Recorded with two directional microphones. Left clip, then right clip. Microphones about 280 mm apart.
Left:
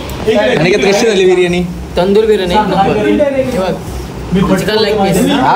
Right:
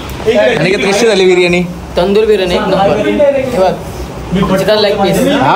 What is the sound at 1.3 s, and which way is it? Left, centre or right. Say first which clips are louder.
Speech: right 2 dB; centre.